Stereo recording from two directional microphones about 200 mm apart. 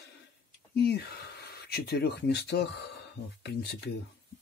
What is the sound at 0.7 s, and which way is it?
Speech, 55° left (ahead or behind).